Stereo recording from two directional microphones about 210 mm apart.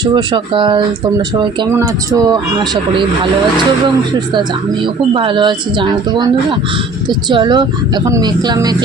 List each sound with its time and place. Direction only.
0.0 s speech: 20° right (ahead or behind)
5.1 s speech: 25° right (ahead or behind)